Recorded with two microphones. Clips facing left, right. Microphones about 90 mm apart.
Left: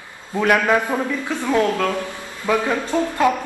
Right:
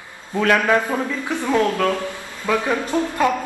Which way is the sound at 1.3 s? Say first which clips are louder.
Right 3 dB; 20° right (ahead or behind).